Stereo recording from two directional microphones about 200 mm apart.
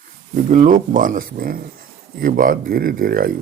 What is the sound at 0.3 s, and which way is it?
Speech, 40° right (ahead or behind).